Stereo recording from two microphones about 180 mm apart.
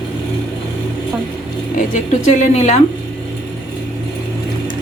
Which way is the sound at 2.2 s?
40° left (ahead or behind).